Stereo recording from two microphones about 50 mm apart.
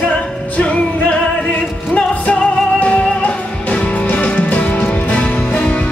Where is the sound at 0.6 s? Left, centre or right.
Left.